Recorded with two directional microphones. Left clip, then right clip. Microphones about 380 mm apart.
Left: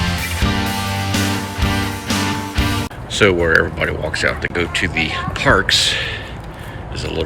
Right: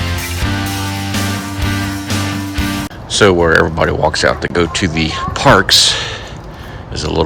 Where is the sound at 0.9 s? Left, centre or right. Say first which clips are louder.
Even; centre.